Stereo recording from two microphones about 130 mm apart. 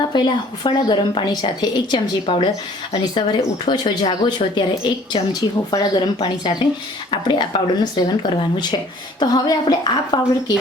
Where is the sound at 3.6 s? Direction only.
35° left (ahead or behind).